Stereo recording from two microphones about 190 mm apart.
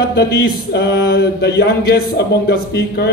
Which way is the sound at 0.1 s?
60° left (ahead or behind).